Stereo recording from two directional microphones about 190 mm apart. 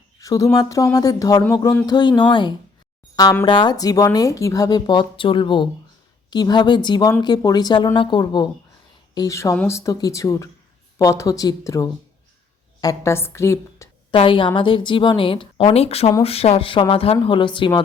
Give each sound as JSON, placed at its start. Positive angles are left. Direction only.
{"t": 0.2, "sound": "a woman's voice", "side_deg": 20}
{"t": 14.1, "sound": "a woman's voice", "side_deg": 25}